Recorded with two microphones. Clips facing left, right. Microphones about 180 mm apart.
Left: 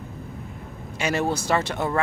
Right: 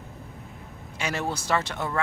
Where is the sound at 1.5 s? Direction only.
15° left (ahead or behind).